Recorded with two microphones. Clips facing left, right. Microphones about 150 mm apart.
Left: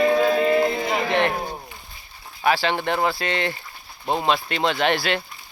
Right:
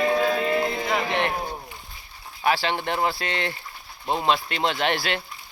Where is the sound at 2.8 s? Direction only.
60° left (ahead or behind).